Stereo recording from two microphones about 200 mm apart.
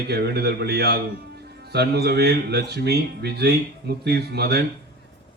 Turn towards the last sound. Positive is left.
turn(degrees=-55)  # may be behind; listen again after turning